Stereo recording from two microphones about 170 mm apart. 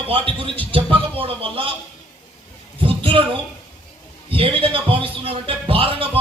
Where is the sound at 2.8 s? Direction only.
30° right (ahead or behind).